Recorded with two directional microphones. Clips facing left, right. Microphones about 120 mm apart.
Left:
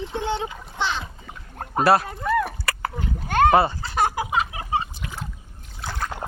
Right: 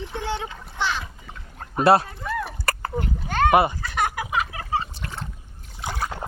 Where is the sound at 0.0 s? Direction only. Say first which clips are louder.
Left 3 dB; 20° left (ahead or behind).